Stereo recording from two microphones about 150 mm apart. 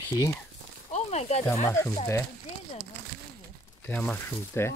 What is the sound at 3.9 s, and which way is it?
Speech, 10° left (ahead or behind).